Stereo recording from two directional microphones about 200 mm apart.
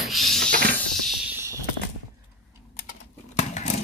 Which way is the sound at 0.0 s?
Centre (ahead or behind).